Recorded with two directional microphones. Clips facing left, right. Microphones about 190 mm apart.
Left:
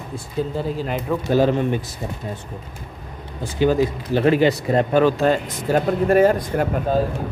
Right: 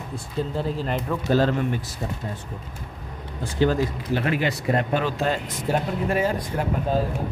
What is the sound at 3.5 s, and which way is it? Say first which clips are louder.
Speech: left 4 dB; 15° left (ahead or behind).